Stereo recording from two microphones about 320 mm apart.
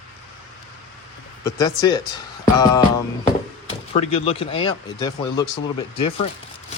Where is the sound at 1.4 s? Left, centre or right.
Centre.